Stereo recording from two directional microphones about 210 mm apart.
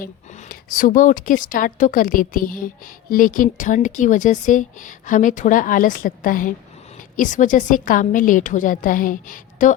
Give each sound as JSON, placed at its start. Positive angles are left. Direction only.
{"t": 0.0, "sound": "a woman's voice", "side_deg": 40}